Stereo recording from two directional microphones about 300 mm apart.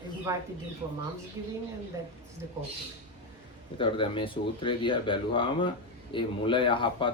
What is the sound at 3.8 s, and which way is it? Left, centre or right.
Speech, centre.